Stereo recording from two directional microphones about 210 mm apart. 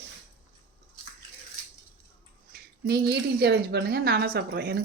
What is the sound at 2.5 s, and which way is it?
A woman's voice, 50° right (ahead or behind).